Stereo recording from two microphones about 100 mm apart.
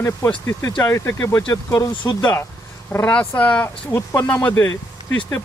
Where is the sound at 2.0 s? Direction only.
50° left (ahead or behind).